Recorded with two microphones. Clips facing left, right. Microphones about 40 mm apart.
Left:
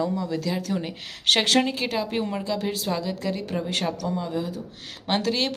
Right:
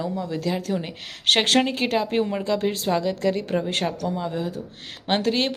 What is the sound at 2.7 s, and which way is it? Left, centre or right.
A woman's voice, right.